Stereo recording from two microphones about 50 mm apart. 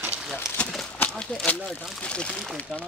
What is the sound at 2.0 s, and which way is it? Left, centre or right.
Speech, left.